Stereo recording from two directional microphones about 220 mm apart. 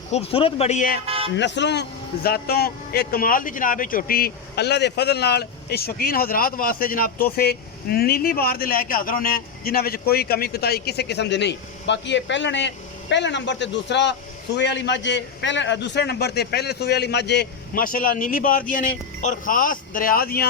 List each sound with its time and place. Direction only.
0.1 s speech: 25° left (ahead or behind)
1.0 s a sound: 25° right (ahead or behind)
1.4 s a man's voice: 50° left (ahead or behind)